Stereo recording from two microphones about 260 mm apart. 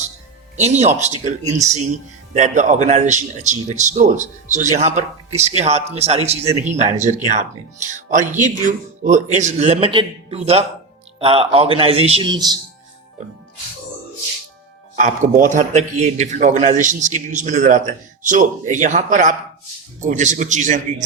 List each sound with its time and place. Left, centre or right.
0.5 s a man's voice: right
14.9 s a man's voice: right